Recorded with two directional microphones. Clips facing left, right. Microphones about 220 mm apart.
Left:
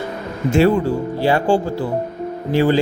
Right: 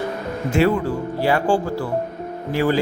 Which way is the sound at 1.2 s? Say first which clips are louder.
Left 2 dB; 25° left (ahead or behind).